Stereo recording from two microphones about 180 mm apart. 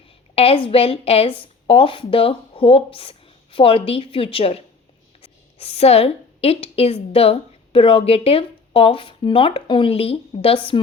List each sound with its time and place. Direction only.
0.3 s a woman's voice: 30° left (ahead or behind)